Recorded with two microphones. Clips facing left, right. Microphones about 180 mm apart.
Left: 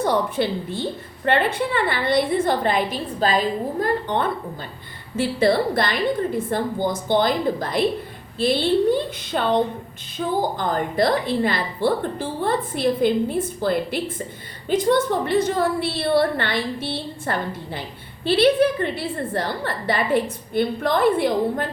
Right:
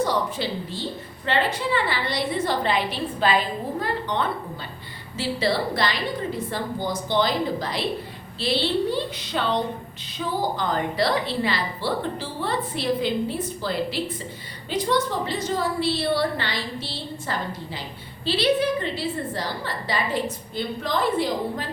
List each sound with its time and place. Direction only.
0.0 s a woman's voice: 55° left (ahead or behind)